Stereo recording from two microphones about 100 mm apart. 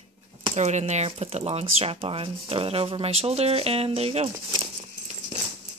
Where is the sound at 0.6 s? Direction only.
90° right.